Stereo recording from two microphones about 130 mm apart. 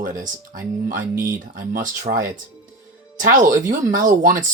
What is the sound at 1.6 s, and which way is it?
Speech, 90° right.